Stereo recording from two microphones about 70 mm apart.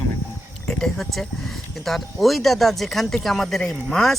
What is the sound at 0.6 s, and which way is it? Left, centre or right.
Speech, centre.